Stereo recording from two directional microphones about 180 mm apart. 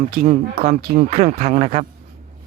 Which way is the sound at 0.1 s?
55° right (ahead or behind).